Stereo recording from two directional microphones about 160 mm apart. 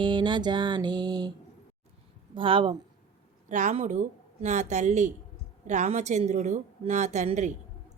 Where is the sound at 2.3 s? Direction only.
35° right (ahead or behind).